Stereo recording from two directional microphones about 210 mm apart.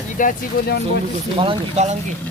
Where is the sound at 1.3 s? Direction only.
30° right (ahead or behind).